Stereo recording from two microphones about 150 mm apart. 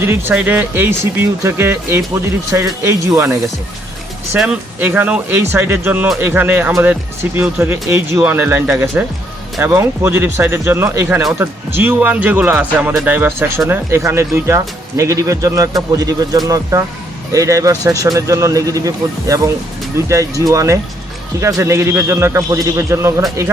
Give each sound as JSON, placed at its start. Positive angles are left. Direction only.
{"t": 0.0, "sound": "speech", "side_deg": -15}
{"t": 4.4, "sound": "speech", "side_deg": -10}